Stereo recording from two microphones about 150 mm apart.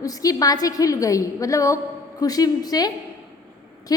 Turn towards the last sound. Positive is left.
turn(degrees=25)  # may be behind; listen again after turning